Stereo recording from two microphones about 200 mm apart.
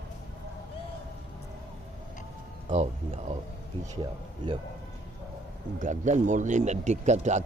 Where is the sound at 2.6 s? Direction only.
35° right (ahead or behind).